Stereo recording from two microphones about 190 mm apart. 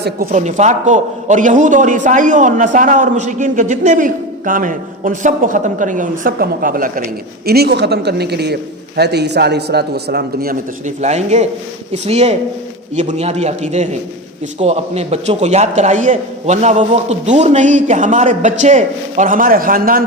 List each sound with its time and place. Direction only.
0.0 s a man's voice: 45° right (ahead or behind)